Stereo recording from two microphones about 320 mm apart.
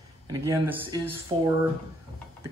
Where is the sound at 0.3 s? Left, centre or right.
Centre.